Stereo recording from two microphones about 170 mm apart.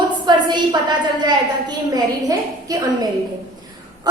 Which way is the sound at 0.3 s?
25° right (ahead or behind).